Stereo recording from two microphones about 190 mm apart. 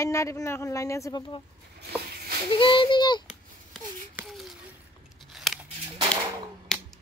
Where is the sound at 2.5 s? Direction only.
25° left (ahead or behind).